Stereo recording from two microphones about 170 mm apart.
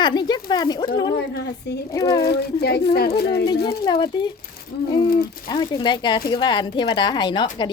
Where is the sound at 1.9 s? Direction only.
25° left (ahead or behind).